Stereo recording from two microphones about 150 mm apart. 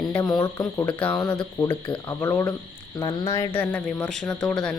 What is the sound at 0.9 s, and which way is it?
Speech, 10° left (ahead or behind).